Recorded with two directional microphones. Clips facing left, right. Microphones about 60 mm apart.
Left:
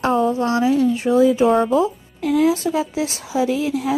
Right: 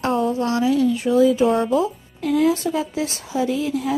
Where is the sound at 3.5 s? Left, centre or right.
Left.